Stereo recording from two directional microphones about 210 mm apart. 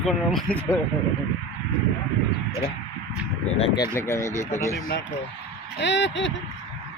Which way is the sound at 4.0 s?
15° left (ahead or behind).